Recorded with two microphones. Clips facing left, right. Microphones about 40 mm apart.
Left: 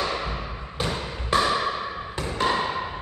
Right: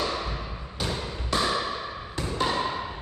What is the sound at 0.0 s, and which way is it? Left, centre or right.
Thump, left.